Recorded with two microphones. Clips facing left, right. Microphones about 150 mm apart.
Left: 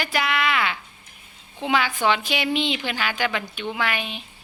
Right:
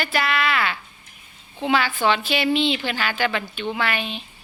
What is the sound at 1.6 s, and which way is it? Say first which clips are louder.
A woman's voice: right 1 dB; 15° left (ahead or behind).